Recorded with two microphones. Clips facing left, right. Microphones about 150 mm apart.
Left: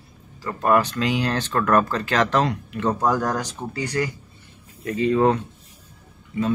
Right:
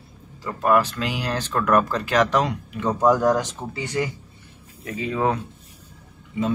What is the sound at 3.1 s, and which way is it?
Speech, 20° right (ahead or behind).